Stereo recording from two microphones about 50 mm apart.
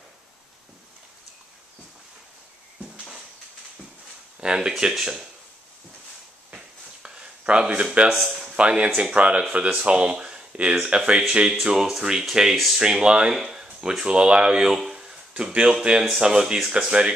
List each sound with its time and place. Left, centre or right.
4.4 s speech: centre
6.5 s a sound: centre
8.1 s speech: centre
8.5 s speech: right